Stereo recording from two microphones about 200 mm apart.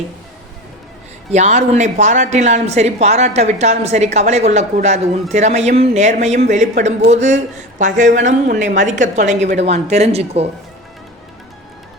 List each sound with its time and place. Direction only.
1.3 s a woman's voice: 35° right (ahead or behind)